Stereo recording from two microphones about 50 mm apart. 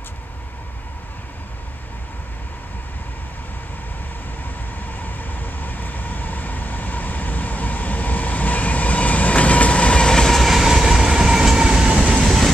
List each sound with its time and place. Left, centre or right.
4.9 s train: left; by 10.4 s centre
10.4 s train: centre
12.3 s train: centre